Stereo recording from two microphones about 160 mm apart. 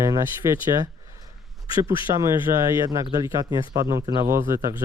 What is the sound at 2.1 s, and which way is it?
Speech, 15° right (ahead or behind).